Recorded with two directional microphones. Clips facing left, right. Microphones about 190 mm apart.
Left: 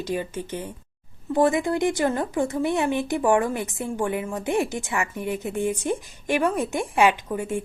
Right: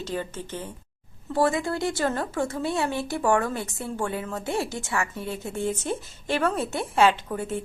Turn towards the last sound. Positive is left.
turn(degrees=15)  # may be behind; listen again after turning